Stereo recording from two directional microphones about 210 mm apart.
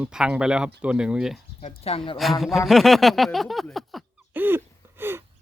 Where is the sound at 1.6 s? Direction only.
30° left (ahead or behind).